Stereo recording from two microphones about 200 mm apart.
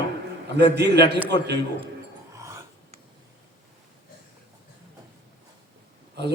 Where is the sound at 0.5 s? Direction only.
55° right (ahead or behind).